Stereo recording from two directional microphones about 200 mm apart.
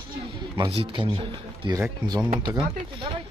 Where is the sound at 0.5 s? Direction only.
25° right (ahead or behind).